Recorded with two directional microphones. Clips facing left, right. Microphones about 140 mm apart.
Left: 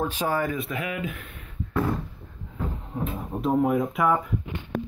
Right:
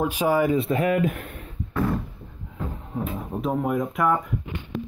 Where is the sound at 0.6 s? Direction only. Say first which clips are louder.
Right 8 dB; 35° right (ahead or behind).